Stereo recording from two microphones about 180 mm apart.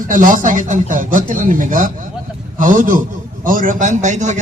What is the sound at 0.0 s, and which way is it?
A man's voice, 45° right (ahead or behind).